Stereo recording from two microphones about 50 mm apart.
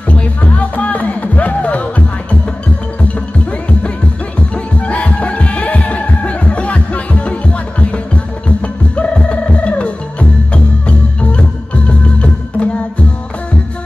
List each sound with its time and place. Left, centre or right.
0.2 s music: left
4.8 s music: left
8.9 s music: left
11.3 s music: left